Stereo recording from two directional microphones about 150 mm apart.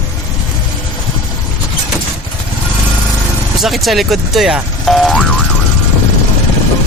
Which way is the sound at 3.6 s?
Centre (ahead or behind).